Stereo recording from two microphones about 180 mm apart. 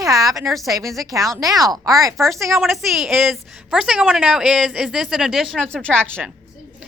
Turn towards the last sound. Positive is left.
turn(degrees=5)  # may be behind; listen again after turning